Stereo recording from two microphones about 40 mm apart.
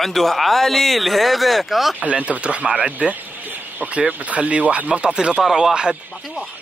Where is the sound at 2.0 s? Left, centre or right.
Right; by 5.6 s centre.